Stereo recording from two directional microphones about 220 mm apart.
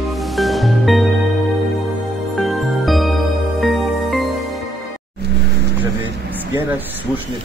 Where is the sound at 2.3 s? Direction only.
Centre (ahead or behind).